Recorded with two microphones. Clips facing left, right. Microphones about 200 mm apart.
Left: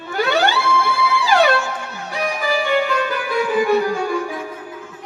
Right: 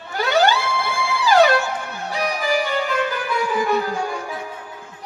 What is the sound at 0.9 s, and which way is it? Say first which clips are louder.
Music: left 1 dB; 40° right (ahead or behind).